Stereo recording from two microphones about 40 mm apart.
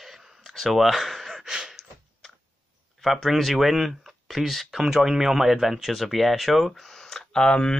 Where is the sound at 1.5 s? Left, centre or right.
Centre.